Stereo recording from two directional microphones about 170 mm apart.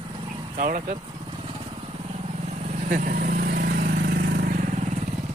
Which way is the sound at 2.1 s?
40° right (ahead or behind).